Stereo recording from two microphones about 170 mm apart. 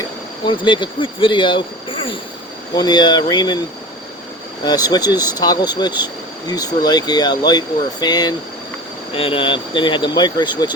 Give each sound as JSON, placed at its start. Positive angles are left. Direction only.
{"t": 0.4, "sound": "speech", "side_deg": 30}
{"t": 4.6, "sound": "speech", "side_deg": 25}